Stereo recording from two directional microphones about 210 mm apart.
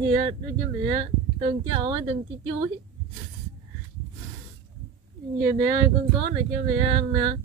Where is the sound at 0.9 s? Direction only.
25° right (ahead or behind).